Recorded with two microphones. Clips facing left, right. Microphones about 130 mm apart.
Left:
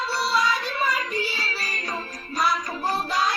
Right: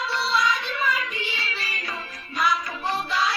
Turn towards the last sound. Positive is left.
turn(degrees=40)  # may be behind; listen again after turning